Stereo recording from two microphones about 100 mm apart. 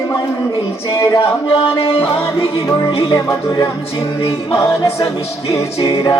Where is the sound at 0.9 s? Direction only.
40° left (ahead or behind).